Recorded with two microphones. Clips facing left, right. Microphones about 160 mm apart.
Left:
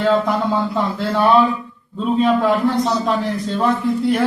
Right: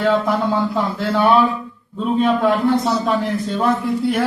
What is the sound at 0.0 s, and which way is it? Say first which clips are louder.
A man's voice: even; centre (ahead or behind).